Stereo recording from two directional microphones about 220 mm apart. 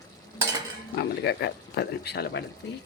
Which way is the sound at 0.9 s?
50° left (ahead or behind).